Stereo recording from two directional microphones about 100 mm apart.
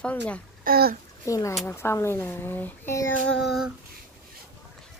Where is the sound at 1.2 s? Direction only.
35° left (ahead or behind).